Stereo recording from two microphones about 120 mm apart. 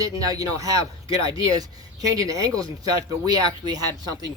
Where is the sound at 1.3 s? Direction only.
45° left (ahead or behind).